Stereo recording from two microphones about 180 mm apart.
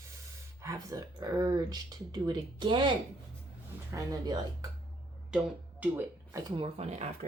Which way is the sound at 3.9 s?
20° right (ahead or behind).